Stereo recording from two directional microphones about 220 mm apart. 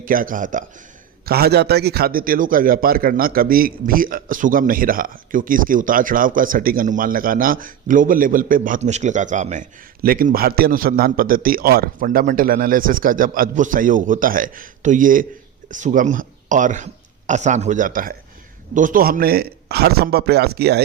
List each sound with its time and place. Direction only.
0.0 s a man's voice: 40° right (ahead or behind)